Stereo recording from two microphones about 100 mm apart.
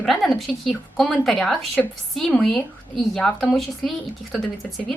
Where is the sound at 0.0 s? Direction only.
Centre (ahead or behind).